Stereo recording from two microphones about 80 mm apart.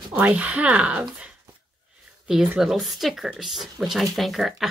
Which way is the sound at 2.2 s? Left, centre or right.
Centre.